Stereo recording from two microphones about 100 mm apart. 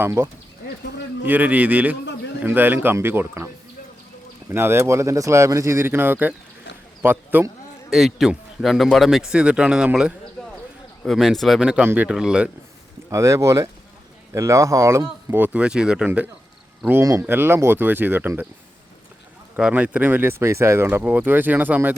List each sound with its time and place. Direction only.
0.0 s speech: 30° right (ahead or behind)
1.2 s a man's voice: 15° right (ahead or behind)
7.9 s speech: centre (ahead or behind)
10.4 s basketball bounce: 5° left (ahead or behind)
11.0 s a man's voice: centre (ahead or behind)
13.1 s speech: 30° right (ahead or behind)
15.5 s a man's voice: 10° right (ahead or behind)
16.9 s speech: 30° right (ahead or behind)
19.5 s speech: 10° right (ahead or behind)